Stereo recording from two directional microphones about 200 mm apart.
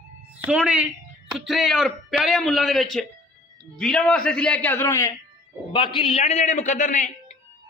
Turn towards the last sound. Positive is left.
turn(degrees=40)  # may be behind; listen again after turning